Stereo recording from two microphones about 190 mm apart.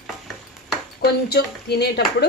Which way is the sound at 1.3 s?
60° left (ahead or behind).